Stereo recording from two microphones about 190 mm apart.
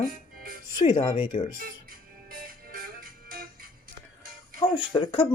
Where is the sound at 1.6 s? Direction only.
50° right (ahead or behind).